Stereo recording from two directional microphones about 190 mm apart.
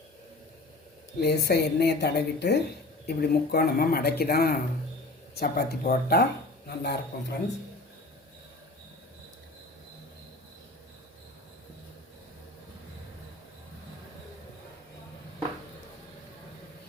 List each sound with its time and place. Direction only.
1.2 s speech: 60° left (ahead or behind)